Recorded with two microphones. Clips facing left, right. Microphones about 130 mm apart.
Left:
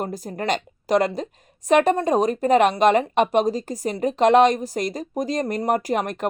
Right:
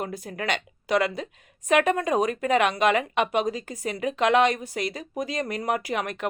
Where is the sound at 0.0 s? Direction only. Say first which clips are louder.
Left 4 dB; 40° left (ahead or behind).